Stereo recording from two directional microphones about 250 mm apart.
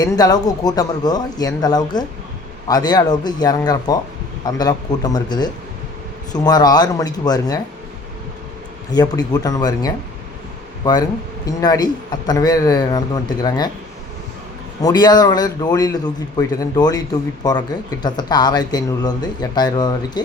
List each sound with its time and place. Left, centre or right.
0.0 s speech: centre
8.9 s speech: centre
11.4 s speech: centre
14.8 s speech: centre